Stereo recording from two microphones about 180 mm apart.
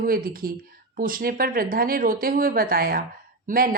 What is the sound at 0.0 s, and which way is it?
Speech, 55° right (ahead or behind).